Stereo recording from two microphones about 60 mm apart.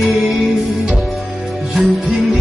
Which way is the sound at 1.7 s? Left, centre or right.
Centre.